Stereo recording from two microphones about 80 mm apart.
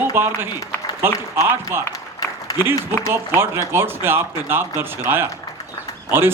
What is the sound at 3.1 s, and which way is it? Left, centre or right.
A man's voice, right.